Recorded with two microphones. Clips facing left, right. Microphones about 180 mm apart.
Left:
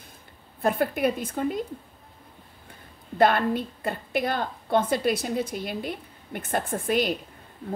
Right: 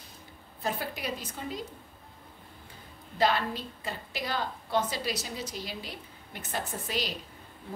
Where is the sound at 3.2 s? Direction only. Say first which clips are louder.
Left 7 dB; 55° left (ahead or behind).